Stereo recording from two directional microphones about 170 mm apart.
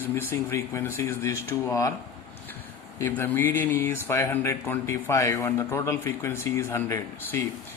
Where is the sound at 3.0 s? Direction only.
10° left (ahead or behind).